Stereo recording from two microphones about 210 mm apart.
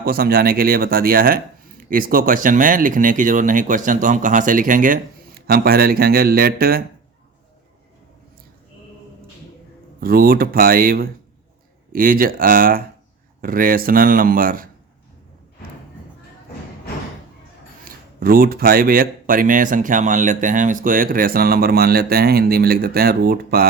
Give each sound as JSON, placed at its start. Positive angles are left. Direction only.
{"t": 0.0, "sound": "speech", "side_deg": -45}
{"t": 10.0, "sound": "speech", "side_deg": -45}
{"t": 17.8, "sound": "speech", "side_deg": -45}